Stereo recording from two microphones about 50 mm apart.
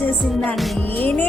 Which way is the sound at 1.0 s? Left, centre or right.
Left.